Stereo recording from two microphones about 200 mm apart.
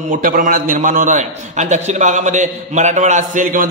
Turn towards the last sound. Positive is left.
turn(degrees=-40)  # may be behind; listen again after turning